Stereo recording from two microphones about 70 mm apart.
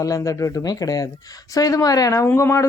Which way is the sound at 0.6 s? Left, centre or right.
Left.